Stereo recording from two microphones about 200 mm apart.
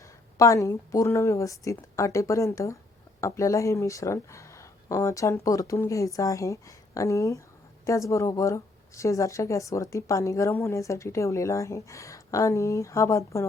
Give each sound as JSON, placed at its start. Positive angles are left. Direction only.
{"t": 0.3, "sound": "speech", "side_deg": 15}